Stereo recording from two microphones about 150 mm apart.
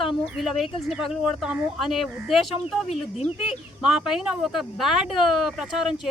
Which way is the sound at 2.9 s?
45° left (ahead or behind).